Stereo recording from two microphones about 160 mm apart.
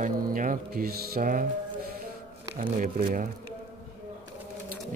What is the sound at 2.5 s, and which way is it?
Speech, 60° right (ahead or behind).